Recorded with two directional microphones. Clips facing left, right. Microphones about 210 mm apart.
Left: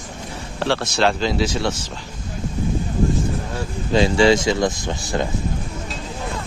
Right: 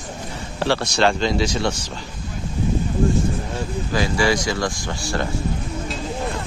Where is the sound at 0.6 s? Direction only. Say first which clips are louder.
Even; centre (ahead or behind).